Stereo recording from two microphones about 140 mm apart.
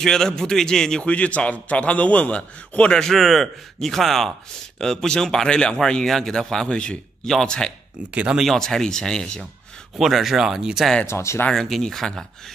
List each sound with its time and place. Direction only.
0.0 s a man's voice: 5° left (ahead or behind)
8.1 s a man's voice: 5° right (ahead or behind)
11.1 s speech: 20° left (ahead or behind)
11.4 s a man's voice: centre (ahead or behind)